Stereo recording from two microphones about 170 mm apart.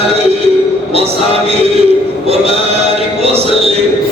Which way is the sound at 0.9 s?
35° right (ahead or behind).